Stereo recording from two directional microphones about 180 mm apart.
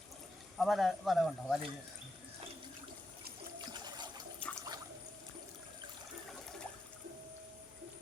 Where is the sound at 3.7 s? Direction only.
25° right (ahead or behind).